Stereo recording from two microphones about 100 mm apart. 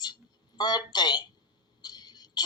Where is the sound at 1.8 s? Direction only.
45° left (ahead or behind).